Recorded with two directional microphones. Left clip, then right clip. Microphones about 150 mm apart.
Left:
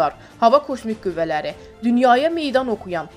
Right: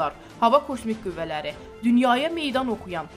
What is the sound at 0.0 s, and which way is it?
A woman's voice, 25° left (ahead or behind).